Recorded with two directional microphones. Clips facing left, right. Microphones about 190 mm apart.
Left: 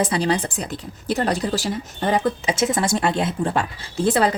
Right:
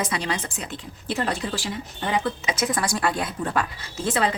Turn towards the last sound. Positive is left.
turn(degrees=35)  # may be behind; listen again after turning